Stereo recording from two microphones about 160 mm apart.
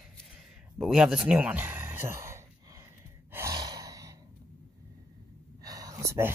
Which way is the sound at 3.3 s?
20° right (ahead or behind).